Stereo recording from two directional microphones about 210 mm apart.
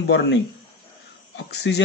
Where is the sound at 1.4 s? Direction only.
55° left (ahead or behind).